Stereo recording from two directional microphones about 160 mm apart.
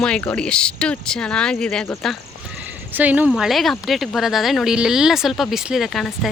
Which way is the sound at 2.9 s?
10° right (ahead or behind).